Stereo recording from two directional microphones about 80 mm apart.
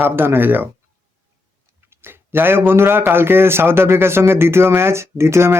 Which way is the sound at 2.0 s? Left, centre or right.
Right.